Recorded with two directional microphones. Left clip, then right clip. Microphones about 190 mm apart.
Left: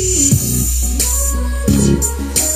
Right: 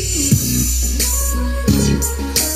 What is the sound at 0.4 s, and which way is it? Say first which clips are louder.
Music: right 1 dB; 55° left (ahead or behind).